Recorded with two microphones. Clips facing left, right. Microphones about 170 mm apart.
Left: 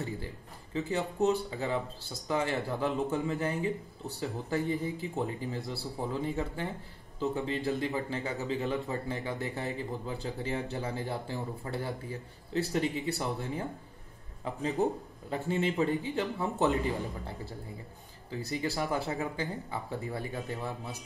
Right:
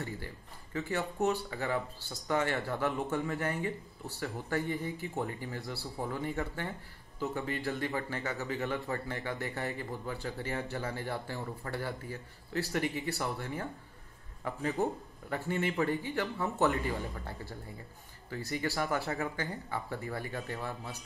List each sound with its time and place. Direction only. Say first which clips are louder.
0.7 s speech: left 3 dB; 20° left (ahead or behind)
18.5 s speech: left 1 dB; 20° left (ahead or behind)